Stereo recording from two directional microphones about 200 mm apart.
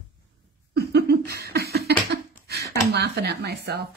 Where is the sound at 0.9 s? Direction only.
55° right (ahead or behind).